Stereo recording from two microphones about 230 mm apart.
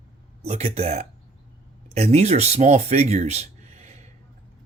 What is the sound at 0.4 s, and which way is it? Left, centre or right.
Speech, right.